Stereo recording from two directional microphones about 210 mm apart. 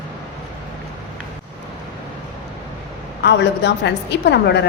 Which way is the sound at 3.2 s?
55° left (ahead or behind).